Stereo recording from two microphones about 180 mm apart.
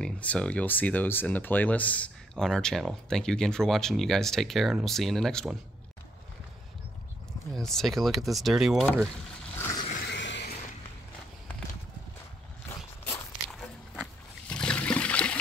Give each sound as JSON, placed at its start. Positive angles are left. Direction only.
{"t": 0.0, "sound": "speech", "side_deg": 5}
{"t": 7.5, "sound": "speech", "side_deg": 0}
{"t": 10.0, "sound": "a sound", "side_deg": 80}
{"t": 12.6, "sound": "walk", "side_deg": 10}
{"t": 14.5, "sound": "trickle", "side_deg": 5}